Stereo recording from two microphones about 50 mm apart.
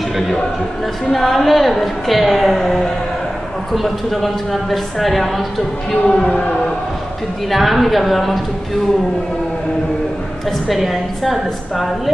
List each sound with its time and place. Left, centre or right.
1.0 s a woman's voice: centre
7.5 s a woman's voice: centre
10.7 s a woman's voice: centre